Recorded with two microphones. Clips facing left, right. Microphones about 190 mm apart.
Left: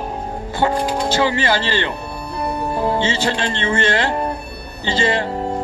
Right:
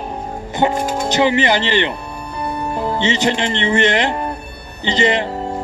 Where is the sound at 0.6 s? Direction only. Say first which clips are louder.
Right 1 dB; 20° right (ahead or behind).